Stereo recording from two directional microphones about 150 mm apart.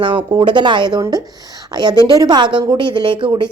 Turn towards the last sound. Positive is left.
turn(degrees=-30)  # may be behind; listen again after turning